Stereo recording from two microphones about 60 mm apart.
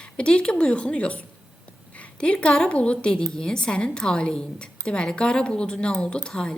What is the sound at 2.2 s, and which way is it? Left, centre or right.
A woman's voice, centre.